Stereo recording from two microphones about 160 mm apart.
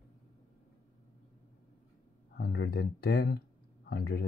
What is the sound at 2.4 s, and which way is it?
Speech, 70° left (ahead or behind).